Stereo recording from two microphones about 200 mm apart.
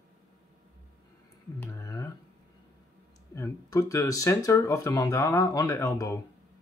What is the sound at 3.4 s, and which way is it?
Speech, 15° left (ahead or behind).